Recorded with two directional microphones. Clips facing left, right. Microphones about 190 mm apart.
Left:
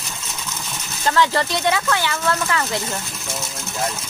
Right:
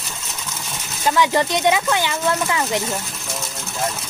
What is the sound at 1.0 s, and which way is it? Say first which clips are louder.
Speech: right 1 dB; 10° right (ahead or behind).